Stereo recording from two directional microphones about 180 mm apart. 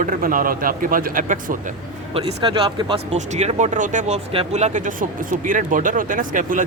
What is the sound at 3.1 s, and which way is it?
Speech, 40° right (ahead or behind).